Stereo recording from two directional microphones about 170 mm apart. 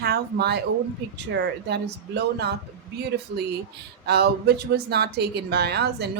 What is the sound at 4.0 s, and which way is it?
A woman's voice, 70° right (ahead or behind).